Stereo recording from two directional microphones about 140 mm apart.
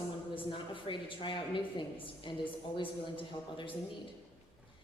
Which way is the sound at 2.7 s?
35° left (ahead or behind).